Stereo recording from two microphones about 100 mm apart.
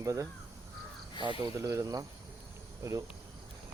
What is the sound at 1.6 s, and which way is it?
Speech, 35° right (ahead or behind).